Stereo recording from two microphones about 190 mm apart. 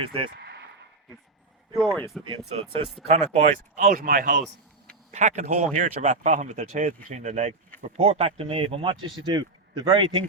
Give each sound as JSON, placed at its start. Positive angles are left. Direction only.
{"t": 0.0, "sound": "speech", "side_deg": -30}
{"t": 0.3, "sound": "a sound", "side_deg": -60}
{"t": 1.7, "sound": "speech", "side_deg": -5}
{"t": 2.5, "sound": "speech", "side_deg": -30}
{"t": 3.8, "sound": "speech", "side_deg": -45}